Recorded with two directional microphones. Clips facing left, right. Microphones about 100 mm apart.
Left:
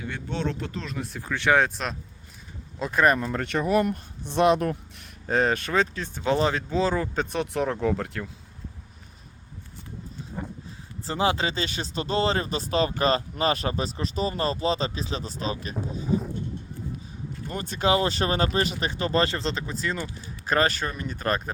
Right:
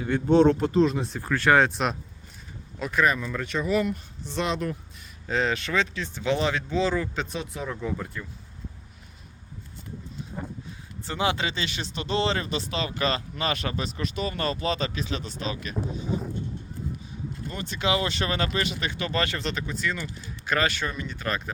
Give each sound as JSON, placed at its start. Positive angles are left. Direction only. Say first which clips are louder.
{"t": 0.0, "sound": "speech", "louder": "right 11 dB", "side_deg": -40}
{"t": 1.2, "sound": "speech", "louder": "right 1 dB", "side_deg": 0}
{"t": 2.7, "sound": "speech", "louder": "left 1 dB", "side_deg": 25}
{"t": 3.0, "sound": "speech", "louder": "left 3 dB", "side_deg": 50}
{"t": 7.3, "sound": "speech", "louder": "left 6 dB", "side_deg": 65}
{"t": 10.3, "sound": "a sound", "louder": "left 1 dB", "side_deg": 0}
{"t": 11.0, "sound": "speech", "louder": "left 2 dB", "side_deg": 30}
{"t": 17.5, "sound": "speech", "louder": "left 3 dB", "side_deg": 40}